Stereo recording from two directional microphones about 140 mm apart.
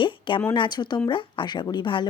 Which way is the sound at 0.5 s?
35° left (ahead or behind).